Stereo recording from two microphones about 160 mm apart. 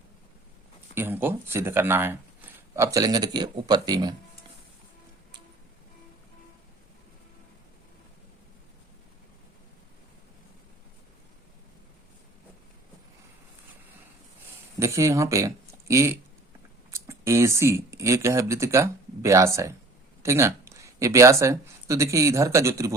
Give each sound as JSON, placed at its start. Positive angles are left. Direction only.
{"t": 0.9, "sound": "speech", "side_deg": -15}
{"t": 14.8, "sound": "speech", "side_deg": -20}